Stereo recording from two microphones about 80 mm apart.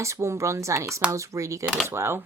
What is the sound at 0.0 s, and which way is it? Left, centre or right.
Speech, right.